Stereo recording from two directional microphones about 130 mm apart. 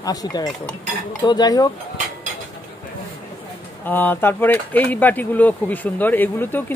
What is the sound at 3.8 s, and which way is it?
Speech, 15° left (ahead or behind).